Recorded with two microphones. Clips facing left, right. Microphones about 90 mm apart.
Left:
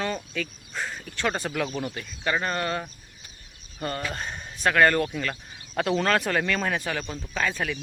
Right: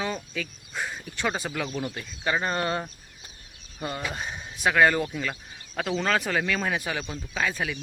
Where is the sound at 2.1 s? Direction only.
15° right (ahead or behind).